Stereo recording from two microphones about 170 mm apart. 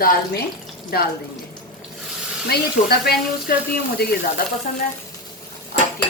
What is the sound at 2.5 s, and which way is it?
Speech, 65° left (ahead or behind).